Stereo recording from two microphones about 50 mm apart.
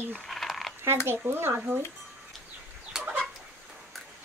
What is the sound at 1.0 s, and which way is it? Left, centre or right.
Speech, right.